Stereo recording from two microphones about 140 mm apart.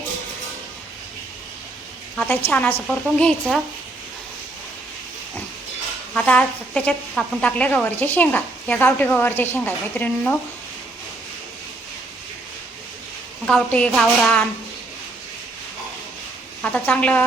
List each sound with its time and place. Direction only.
2.1 s a woman's voice: 15° left (ahead or behind)
6.1 s a woman's voice: 10° left (ahead or behind)
13.5 s a woman's voice: 10° left (ahead or behind)
16.7 s a woman's voice: 10° left (ahead or behind)